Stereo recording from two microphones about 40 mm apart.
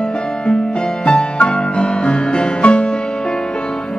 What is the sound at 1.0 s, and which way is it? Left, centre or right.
Music, left.